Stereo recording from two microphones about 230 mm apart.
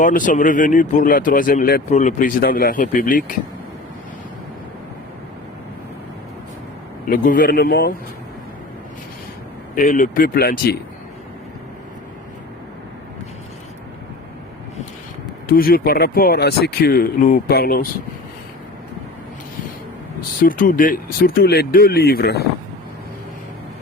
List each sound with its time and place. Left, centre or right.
0.0 s speech: left
7.1 s speech: left
9.7 s speech: left
15.4 s speech: left
20.4 s speech: left